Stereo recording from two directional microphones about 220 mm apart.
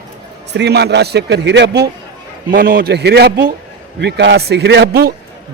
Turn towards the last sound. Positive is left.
turn(degrees=-50)  # may be behind; listen again after turning